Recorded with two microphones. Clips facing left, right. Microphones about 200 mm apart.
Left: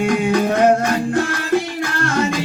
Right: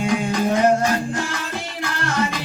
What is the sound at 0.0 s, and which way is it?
Music, 60° left (ahead or behind).